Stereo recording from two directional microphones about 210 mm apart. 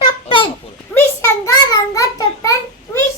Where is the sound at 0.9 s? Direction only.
15° left (ahead or behind).